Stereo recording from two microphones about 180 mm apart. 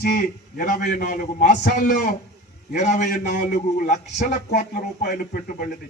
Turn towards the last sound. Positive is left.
turn(degrees=50)  # may be behind; listen again after turning